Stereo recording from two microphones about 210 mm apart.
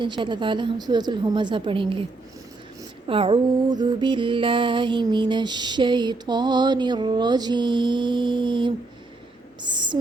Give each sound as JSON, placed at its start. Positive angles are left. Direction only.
{"t": 0.0, "sound": "music", "side_deg": -20}
{"t": 3.1, "sound": "music", "side_deg": -25}